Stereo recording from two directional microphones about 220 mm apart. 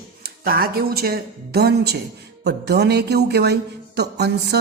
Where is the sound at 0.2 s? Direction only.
40° right (ahead or behind).